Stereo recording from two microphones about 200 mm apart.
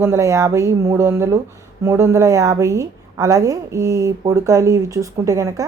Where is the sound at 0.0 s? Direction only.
15° right (ahead or behind).